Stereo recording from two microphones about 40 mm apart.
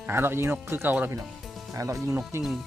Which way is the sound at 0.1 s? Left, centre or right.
Right.